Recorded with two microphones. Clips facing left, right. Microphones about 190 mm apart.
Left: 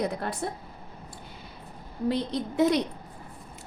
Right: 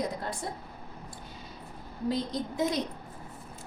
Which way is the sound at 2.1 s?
65° left (ahead or behind).